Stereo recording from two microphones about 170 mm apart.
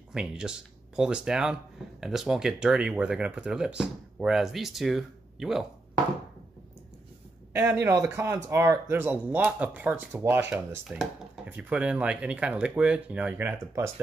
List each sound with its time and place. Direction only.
0.1 s speech: 5° right (ahead or behind)
7.5 s speech: 15° right (ahead or behind)